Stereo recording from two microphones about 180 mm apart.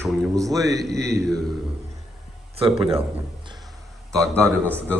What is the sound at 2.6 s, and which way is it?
Speech, 30° right (ahead or behind).